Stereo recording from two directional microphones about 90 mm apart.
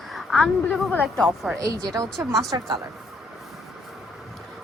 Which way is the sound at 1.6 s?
40° right (ahead or behind).